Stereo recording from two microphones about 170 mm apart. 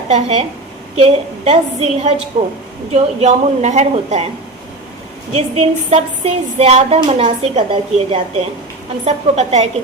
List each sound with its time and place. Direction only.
0.1 s speech: 40° right (ahead or behind)
5.3 s speech: 35° right (ahead or behind)